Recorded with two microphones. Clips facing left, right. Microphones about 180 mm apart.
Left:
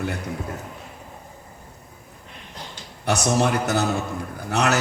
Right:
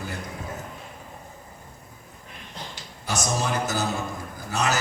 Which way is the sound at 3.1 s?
65° left (ahead or behind).